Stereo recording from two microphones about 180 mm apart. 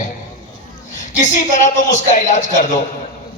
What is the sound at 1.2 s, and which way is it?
A man's voice, 45° left (ahead or behind).